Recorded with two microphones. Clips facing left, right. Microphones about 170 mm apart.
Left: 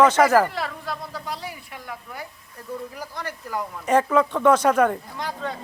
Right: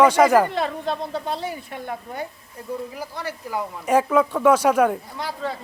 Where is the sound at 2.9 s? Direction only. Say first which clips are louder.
Right 2 dB; 10° right (ahead or behind).